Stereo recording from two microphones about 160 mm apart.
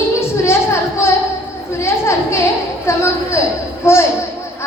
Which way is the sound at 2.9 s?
15° left (ahead or behind).